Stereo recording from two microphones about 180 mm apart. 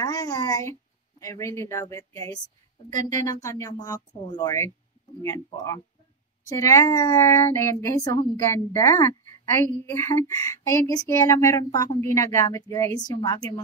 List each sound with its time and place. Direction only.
0.0 s speech: 20° left (ahead or behind)